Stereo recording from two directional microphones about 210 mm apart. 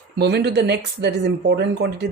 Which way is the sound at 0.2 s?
50° right (ahead or behind).